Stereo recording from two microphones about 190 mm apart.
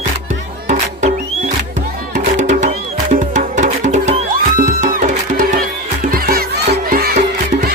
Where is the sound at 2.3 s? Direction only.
40° right (ahead or behind).